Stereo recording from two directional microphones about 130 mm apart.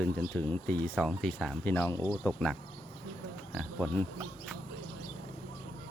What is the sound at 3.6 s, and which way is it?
Speech, 10° left (ahead or behind).